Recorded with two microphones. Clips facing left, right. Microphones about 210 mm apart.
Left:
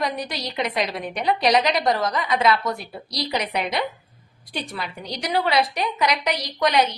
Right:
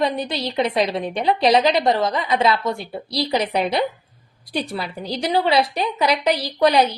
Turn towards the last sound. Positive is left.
turn(degrees=-30)  # may be behind; listen again after turning